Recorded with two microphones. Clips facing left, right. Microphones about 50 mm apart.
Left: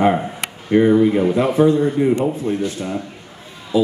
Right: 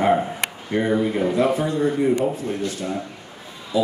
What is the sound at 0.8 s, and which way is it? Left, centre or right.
Speech, centre.